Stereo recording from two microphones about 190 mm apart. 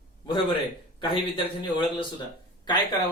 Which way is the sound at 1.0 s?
25° left (ahead or behind).